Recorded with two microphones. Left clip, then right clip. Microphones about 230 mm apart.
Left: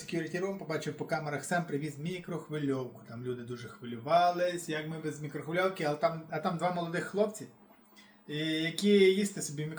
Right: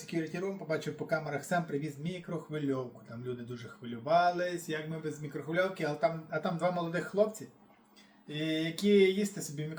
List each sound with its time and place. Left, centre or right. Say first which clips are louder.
0.1 s a man's voice: left 1 dB; centre
4.0 s a man's voice: left 1 dB; centre
8.3 s a man's voice: left 1 dB; centre